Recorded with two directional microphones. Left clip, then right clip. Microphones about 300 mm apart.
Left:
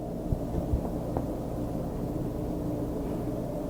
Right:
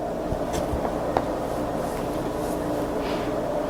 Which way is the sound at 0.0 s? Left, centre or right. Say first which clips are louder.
Right 8 dB; centre.